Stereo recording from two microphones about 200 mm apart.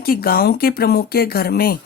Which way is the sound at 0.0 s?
50° left (ahead or behind).